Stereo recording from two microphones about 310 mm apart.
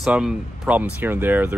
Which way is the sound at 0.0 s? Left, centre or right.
Centre.